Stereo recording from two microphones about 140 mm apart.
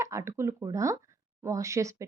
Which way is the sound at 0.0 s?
20° right (ahead or behind).